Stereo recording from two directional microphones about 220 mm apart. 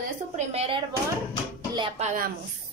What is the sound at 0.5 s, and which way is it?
Speech, 25° right (ahead or behind).